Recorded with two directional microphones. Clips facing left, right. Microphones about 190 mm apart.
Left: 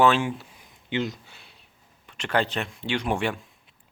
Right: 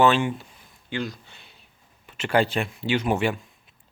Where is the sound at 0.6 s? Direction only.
20° left (ahead or behind).